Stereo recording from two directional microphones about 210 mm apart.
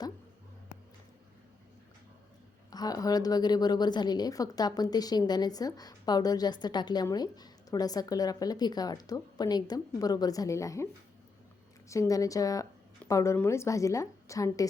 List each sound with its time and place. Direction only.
2.6 s a woman's voice: 20° left (ahead or behind)
11.9 s a woman's voice: 15° left (ahead or behind)